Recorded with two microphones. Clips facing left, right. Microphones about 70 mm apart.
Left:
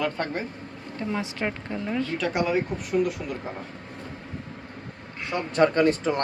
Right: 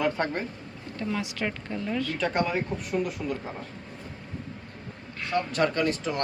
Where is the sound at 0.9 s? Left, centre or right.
Left.